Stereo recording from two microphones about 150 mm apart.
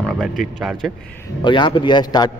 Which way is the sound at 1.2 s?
30° left (ahead or behind).